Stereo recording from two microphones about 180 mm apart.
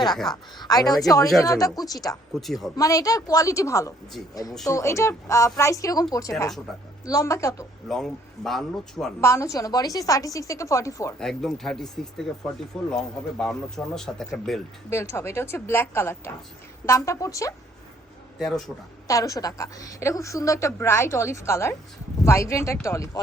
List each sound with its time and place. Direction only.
0.6 s a woman's voice: 20° left (ahead or behind)
2.4 s speech: centre (ahead or behind)
2.7 s a woman's voice: 20° left (ahead or behind)
6.7 s speech: centre (ahead or behind)
7.1 s a woman's voice: 15° left (ahead or behind)
7.9 s speech: centre (ahead or behind)
9.2 s a woman's voice: 15° left (ahead or behind)
11.2 s speech: centre (ahead or behind)
14.8 s a woman's voice: 15° left (ahead or behind)
18.3 s speech: centre (ahead or behind)
19.0 s a woman's voice: 20° left (ahead or behind)